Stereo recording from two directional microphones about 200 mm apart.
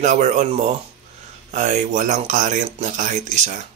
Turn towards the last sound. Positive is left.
turn(degrees=-35)  # may be behind; listen again after turning